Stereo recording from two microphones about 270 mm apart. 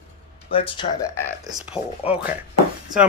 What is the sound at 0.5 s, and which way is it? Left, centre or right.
Speech, centre.